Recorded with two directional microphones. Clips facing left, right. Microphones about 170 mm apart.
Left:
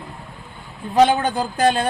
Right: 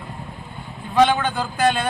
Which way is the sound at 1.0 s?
40° left (ahead or behind).